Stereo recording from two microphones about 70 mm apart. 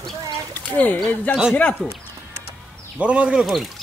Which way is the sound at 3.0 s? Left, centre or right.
Centre.